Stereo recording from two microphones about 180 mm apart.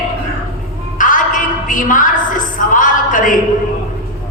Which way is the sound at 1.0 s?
45° left (ahead or behind).